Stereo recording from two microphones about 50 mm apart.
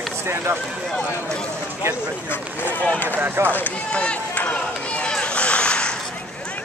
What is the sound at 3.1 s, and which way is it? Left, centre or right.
Speech, right.